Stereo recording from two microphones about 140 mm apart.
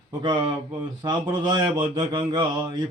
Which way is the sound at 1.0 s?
30° right (ahead or behind).